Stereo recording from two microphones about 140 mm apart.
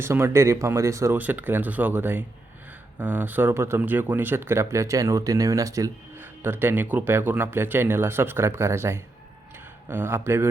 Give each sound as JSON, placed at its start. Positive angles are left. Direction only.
{"t": 0.0, "sound": "speech", "side_deg": -20}